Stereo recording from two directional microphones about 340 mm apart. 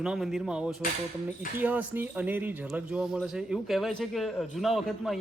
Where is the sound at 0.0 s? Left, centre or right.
Centre.